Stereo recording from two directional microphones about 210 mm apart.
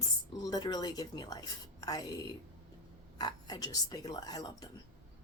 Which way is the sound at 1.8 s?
15° left (ahead or behind).